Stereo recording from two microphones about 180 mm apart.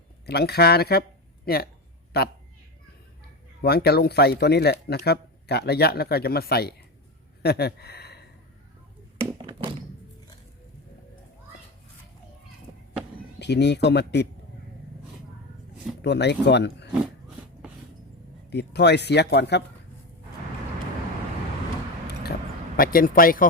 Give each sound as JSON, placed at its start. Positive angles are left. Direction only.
{"t": 0.3, "sound": "speech", "side_deg": 65}
{"t": 3.6, "sound": "speech", "side_deg": 60}
{"t": 9.1, "sound": "a sound", "side_deg": -30}
{"t": 13.4, "sound": "speech", "side_deg": 70}
{"t": 16.0, "sound": "speech", "side_deg": 70}
{"t": 18.5, "sound": "speech", "side_deg": 70}
{"t": 22.0, "sound": "vehicle", "side_deg": 60}
{"t": 22.8, "sound": "speech", "side_deg": 55}